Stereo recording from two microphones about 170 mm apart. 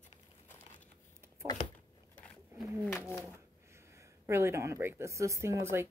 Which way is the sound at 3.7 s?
15° right (ahead or behind).